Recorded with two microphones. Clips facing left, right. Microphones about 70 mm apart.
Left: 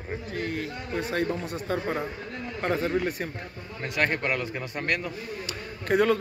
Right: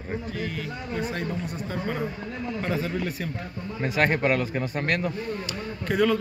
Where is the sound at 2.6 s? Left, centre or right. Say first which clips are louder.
Left 4 dB; left.